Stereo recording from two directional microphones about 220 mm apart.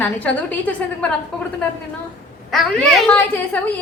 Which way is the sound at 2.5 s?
Centre (ahead or behind).